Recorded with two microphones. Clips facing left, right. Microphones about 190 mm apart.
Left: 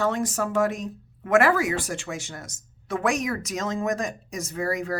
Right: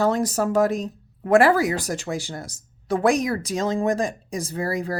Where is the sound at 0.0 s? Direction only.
35° right (ahead or behind).